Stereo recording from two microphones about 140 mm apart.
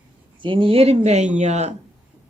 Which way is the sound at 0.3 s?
35° right (ahead or behind).